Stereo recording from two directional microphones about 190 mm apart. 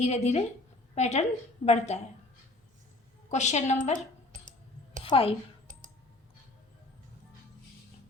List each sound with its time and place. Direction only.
0.0 s a woman's voice: 35° left (ahead or behind)
3.2 s a woman's voice: 35° left (ahead or behind)
5.0 s a woman's voice: 30° left (ahead or behind)